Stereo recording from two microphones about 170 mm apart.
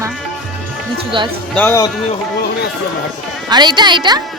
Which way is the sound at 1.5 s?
10° left (ahead or behind).